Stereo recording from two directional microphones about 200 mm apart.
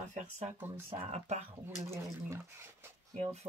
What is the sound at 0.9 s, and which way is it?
Speech, 30° right (ahead or behind).